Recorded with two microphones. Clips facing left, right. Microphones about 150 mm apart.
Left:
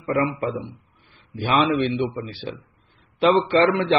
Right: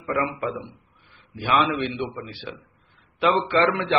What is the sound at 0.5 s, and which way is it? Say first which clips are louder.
A man's voice: left 2 dB; 30° left (ahead or behind).